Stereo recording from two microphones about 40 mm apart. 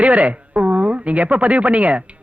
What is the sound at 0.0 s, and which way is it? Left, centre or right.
A woman's voice, right.